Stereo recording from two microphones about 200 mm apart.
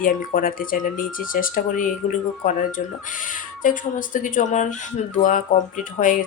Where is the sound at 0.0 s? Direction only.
45° left (ahead or behind).